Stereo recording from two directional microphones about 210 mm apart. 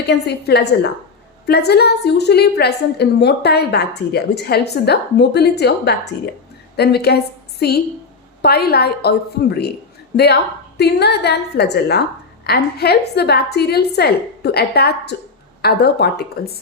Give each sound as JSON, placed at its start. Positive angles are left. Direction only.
{"t": 0.1, "sound": "a woman's voice", "side_deg": 50}
{"t": 8.4, "sound": "a woman's voice", "side_deg": 50}
{"t": 10.8, "sound": "a woman's voice", "side_deg": 50}